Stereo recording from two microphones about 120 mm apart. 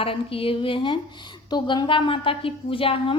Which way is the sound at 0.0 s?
50° left (ahead or behind).